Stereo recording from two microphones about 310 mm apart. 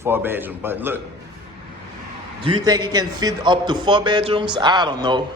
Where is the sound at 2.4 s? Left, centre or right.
Centre.